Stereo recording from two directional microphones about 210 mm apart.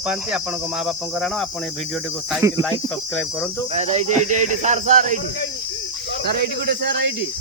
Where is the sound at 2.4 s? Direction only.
15° right (ahead or behind).